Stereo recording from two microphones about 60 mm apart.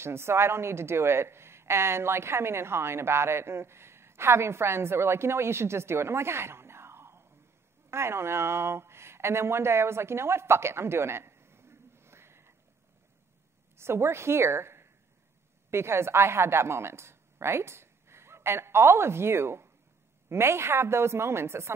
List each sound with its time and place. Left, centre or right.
0.0 s speech: right
13.7 s a woman's voice: right